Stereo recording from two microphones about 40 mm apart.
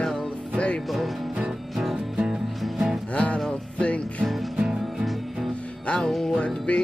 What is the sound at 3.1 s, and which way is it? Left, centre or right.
Music, left.